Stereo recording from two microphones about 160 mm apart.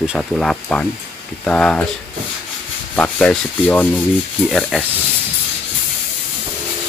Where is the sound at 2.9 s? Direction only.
10° left (ahead or behind).